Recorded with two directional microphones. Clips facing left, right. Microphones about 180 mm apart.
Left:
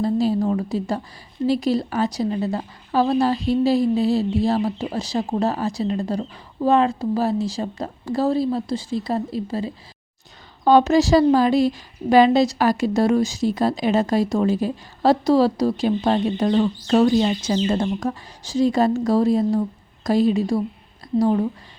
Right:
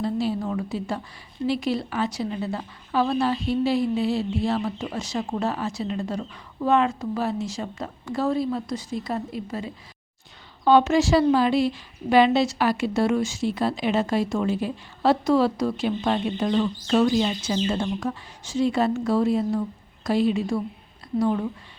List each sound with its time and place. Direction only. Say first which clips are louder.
0.0 s a woman's voice: left 6 dB; 40° left (ahead or behind)